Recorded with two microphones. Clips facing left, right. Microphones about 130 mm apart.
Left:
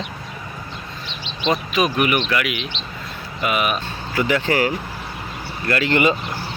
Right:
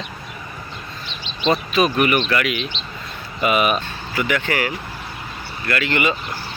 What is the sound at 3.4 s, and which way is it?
Speech, centre (ahead or behind).